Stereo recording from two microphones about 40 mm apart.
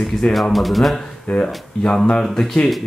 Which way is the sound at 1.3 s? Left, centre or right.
Left.